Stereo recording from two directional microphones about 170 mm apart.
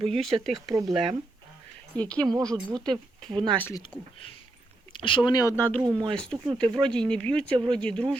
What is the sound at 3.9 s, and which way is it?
Speech, 10° left (ahead or behind).